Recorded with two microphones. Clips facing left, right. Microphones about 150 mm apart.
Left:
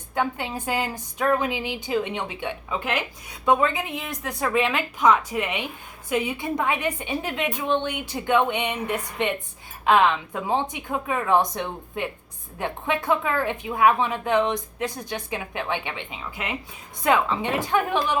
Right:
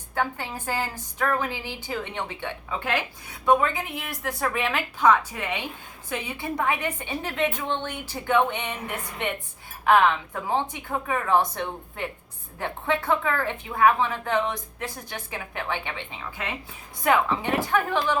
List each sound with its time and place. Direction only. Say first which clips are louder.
0.2 s a woman's voice: left 2 dB; 20° left (ahead or behind)
3.6 s a woman's voice: left 3 dB; 20° left (ahead or behind)
10.5 s a woman's voice: left 1 dB; 15° left (ahead or behind)